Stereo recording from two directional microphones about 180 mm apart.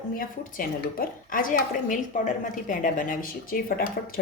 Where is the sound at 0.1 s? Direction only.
50° left (ahead or behind).